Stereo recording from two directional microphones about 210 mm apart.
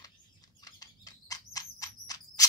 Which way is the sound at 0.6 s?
15° left (ahead or behind).